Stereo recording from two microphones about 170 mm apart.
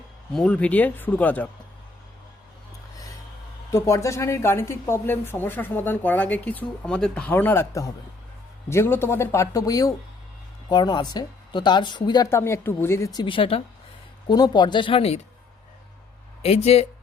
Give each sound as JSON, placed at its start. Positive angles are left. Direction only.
{"t": 0.3, "sound": "a woman's voice", "side_deg": 10}
{"t": 3.7, "sound": "a woman's voice", "side_deg": 20}
{"t": 16.7, "sound": "speech", "side_deg": 40}